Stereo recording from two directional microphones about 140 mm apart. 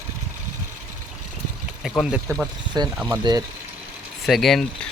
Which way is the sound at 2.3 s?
20° right (ahead or behind).